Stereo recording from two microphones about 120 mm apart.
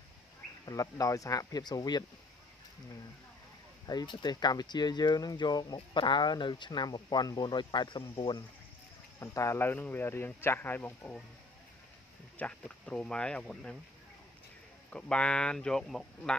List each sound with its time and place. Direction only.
0.7 s speech: 30° left (ahead or behind)
3.8 s speech: 35° left (ahead or behind)
9.2 s speech: 25° left (ahead or behind)
12.4 s speech: 10° left (ahead or behind)
14.9 s speech: 10° left (ahead or behind)